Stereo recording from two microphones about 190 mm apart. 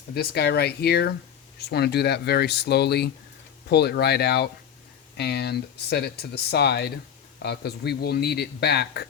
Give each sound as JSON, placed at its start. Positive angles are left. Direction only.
{"t": 0.1, "sound": "speech", "side_deg": 60}